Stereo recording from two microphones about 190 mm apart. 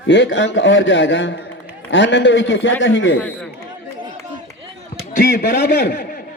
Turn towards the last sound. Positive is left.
turn(degrees=60)  # may be behind; listen again after turning